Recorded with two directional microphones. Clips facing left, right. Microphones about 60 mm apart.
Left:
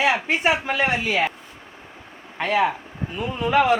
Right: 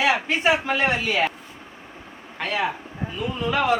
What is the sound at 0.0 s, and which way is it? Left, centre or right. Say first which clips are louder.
Speech: even; left.